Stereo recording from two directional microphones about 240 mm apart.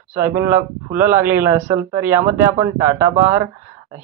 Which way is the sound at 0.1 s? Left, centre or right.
Centre.